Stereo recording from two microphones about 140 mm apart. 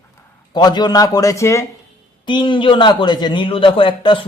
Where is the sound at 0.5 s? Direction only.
30° left (ahead or behind).